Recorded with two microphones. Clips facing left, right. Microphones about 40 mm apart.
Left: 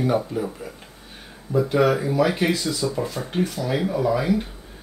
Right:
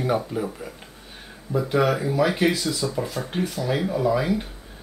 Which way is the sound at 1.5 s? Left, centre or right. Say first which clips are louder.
Left 2 dB; centre.